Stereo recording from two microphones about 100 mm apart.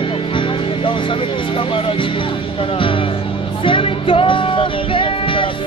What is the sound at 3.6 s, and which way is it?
Music, 60° left (ahead or behind).